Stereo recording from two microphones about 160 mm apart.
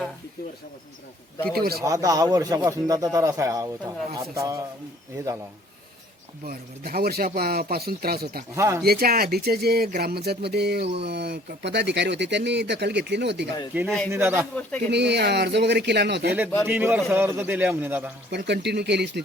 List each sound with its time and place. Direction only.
1.5 s speech: 70° right (ahead or behind)
1.8 s a man's voice: 20° right (ahead or behind)
6.4 s speech: 70° right (ahead or behind)
8.5 s a man's voice: 15° right (ahead or behind)
8.8 s speech: 70° right (ahead or behind); by 13.5 s 90° right
13.7 s a man's voice: 15° right (ahead or behind)
14.8 s speech: 90° right
16.6 s a man's voice: 10° right (ahead or behind)
18.3 s speech: 90° right